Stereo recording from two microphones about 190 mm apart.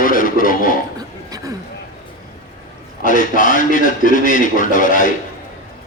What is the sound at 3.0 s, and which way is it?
A man's voice, 45° left (ahead or behind).